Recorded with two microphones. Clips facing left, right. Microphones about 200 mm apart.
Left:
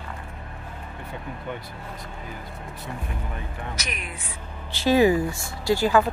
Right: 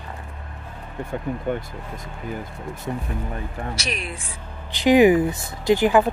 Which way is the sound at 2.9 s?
35° right (ahead or behind).